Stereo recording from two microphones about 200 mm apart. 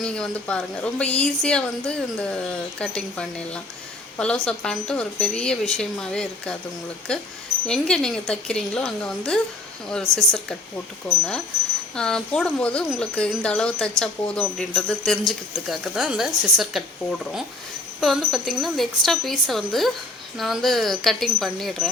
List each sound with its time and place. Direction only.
0.0 s speech: 5° left (ahead or behind)